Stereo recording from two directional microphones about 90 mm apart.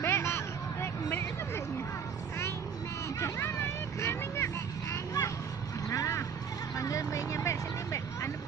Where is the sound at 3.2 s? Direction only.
30° left (ahead or behind).